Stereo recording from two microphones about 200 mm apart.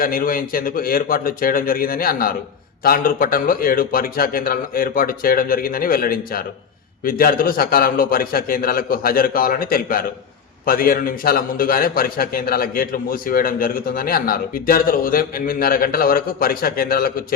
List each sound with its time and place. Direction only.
0.0 s a man's voice: 45° left (ahead or behind)